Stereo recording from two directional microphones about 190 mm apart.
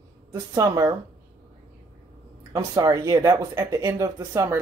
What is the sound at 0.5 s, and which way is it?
Speech, 15° right (ahead or behind).